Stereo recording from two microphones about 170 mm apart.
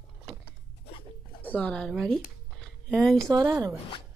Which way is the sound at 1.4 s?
10° left (ahead or behind).